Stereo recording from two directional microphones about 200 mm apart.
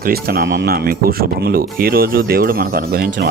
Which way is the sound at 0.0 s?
50° right (ahead or behind).